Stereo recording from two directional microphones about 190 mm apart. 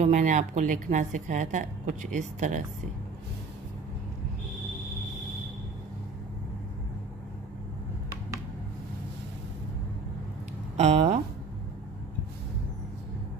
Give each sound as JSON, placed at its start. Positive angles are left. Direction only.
{"t": 0.0, "sound": "a woman's voice", "side_deg": -40}
{"t": 10.8, "sound": "speech", "side_deg": -35}